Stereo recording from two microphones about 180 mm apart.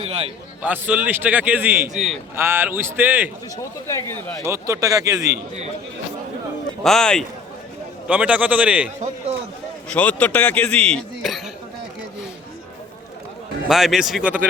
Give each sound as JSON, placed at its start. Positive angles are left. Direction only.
{"t": 0.0, "sound": "a man's voice", "side_deg": -30}
{"t": 0.6, "sound": "a man's voice", "side_deg": -10}
{"t": 3.6, "sound": "a man's voice", "side_deg": 15}
{"t": 4.4, "sound": "a man's voice", "side_deg": -15}
{"t": 6.8, "sound": "a man's voice", "side_deg": 5}
{"t": 9.9, "sound": "a man's voice", "side_deg": 10}
{"t": 13.7, "sound": "speech", "side_deg": 0}